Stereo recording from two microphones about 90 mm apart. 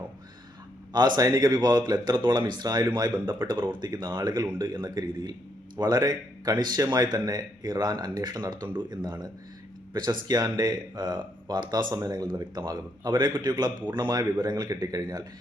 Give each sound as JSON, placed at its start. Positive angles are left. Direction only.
{"t": 0.9, "sound": "a man's voice", "side_deg": -50}